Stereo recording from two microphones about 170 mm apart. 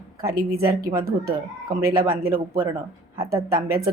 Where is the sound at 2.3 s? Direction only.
15° right (ahead or behind).